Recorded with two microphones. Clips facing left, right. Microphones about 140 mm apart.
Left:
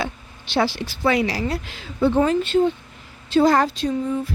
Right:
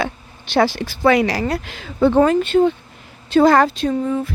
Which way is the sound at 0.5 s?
50° right (ahead or behind).